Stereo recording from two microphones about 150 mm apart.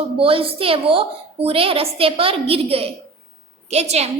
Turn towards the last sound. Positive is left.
turn(degrees=-45)  # may be behind; listen again after turning